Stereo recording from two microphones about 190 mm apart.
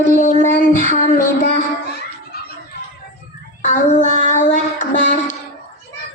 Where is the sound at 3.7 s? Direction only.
40° left (ahead or behind).